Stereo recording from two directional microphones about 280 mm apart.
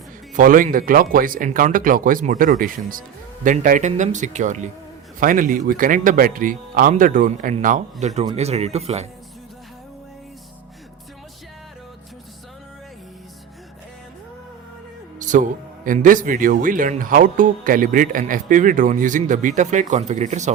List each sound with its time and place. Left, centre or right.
0.3 s a man's voice: right
15.2 s a man's voice: right